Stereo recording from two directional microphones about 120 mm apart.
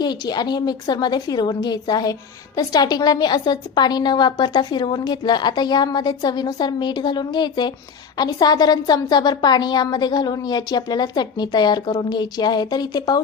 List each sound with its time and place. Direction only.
0.0 s a woman's voice: 35° left (ahead or behind)